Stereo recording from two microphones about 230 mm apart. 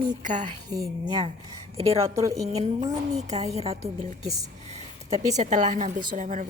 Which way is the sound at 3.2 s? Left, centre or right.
Right.